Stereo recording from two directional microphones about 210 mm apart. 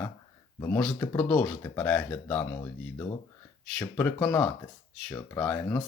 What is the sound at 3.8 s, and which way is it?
Speech, 5° left (ahead or behind).